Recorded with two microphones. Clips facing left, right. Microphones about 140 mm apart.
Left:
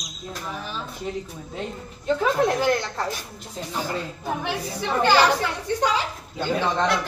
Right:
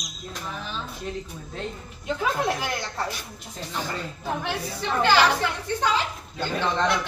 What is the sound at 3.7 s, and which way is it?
A woman's voice, 10° left (ahead or behind).